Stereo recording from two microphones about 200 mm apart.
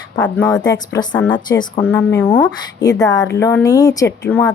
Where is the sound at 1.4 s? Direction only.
20° left (ahead or behind).